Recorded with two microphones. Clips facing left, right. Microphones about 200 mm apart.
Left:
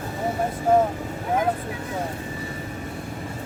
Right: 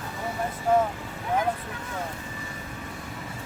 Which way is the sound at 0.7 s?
40° left (ahead or behind).